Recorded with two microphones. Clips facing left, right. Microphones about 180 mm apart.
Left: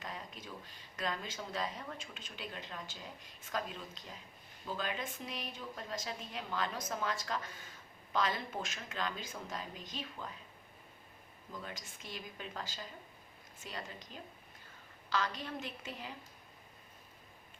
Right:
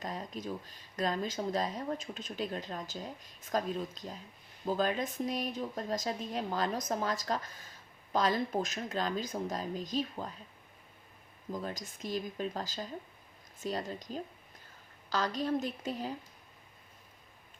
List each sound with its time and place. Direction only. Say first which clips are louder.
0.0 s speech: right 8 dB; 40° right (ahead or behind)
11.5 s speech: right 8 dB; 40° right (ahead or behind)